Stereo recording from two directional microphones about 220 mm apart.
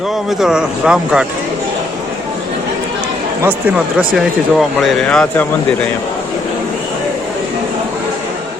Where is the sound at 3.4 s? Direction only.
5° right (ahead or behind).